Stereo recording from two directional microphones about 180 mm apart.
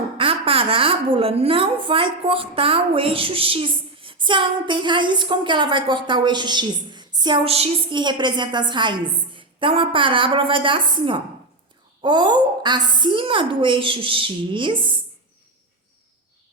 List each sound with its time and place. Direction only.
0.2 s a woman's voice: 30° right (ahead or behind)